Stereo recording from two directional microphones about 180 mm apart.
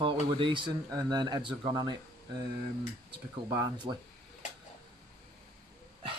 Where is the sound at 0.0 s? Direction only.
30° right (ahead or behind).